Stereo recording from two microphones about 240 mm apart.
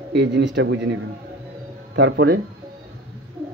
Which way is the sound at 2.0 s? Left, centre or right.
Right.